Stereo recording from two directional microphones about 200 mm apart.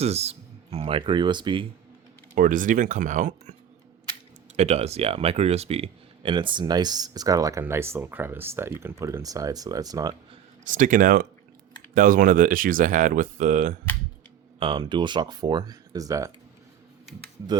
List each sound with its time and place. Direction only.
0.0 s speech: 30° right (ahead or behind)
2.3 s speech: 40° right (ahead or behind)
4.5 s speech: 30° right (ahead or behind)
10.6 s speech: 40° right (ahead or behind)
14.6 s speech: 25° right (ahead or behind)